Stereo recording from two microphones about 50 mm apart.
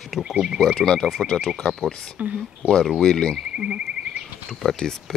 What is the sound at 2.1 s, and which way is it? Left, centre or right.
Speech, right.